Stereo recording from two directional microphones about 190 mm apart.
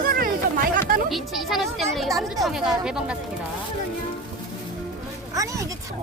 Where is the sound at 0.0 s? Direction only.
50° right (ahead or behind).